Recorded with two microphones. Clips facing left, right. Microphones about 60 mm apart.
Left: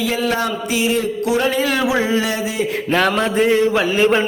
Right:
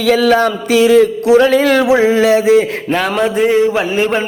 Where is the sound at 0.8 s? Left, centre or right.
Right.